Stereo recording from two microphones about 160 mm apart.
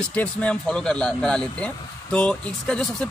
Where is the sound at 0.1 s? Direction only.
10° left (ahead or behind).